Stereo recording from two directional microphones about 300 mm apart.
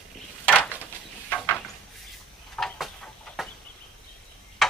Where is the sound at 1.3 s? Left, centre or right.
Centre.